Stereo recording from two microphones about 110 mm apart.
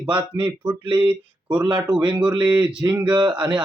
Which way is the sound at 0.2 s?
45° right (ahead or behind).